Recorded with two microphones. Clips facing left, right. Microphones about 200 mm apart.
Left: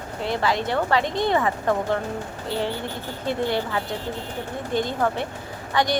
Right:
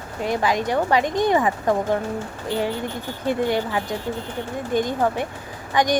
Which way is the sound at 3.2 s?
15° right (ahead or behind).